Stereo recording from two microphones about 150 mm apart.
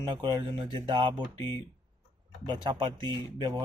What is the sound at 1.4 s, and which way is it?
Speech, 15° left (ahead or behind).